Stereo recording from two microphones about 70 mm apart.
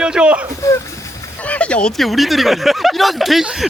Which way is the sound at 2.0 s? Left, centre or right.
Centre.